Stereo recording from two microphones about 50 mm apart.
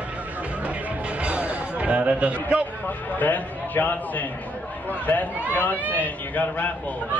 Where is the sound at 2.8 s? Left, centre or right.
Left.